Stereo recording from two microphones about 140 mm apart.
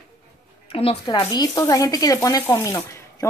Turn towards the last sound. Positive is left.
turn(degrees=20)  # may be behind; listen again after turning